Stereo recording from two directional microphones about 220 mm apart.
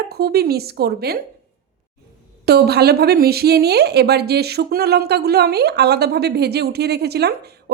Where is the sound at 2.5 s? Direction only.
45° right (ahead or behind).